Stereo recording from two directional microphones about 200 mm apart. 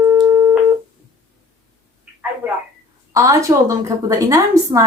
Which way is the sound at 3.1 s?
15° right (ahead or behind).